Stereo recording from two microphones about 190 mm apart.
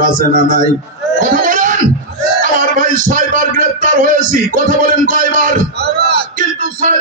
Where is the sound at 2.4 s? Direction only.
45° right (ahead or behind).